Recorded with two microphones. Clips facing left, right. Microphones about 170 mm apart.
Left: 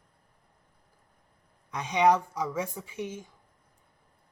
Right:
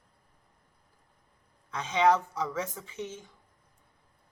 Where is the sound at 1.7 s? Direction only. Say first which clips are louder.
Left 1 dB; 15° left (ahead or behind).